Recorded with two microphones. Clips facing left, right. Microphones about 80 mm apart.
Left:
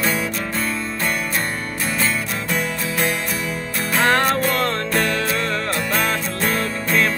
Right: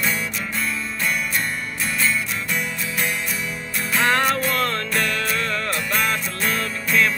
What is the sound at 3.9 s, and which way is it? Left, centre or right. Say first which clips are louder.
Music: left 2 dB; left.